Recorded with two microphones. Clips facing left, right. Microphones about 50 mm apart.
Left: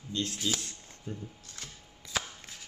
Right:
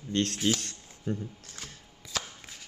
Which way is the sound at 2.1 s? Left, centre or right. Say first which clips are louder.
Left 1 dB; centre.